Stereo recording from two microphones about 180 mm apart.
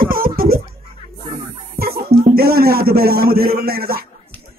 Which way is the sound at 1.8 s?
55° right (ahead or behind).